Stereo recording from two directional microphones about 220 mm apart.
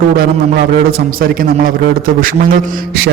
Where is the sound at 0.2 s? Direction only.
45° right (ahead or behind).